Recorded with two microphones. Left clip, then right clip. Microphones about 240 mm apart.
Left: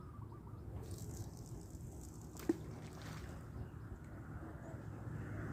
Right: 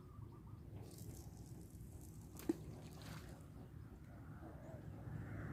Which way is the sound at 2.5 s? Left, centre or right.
Right.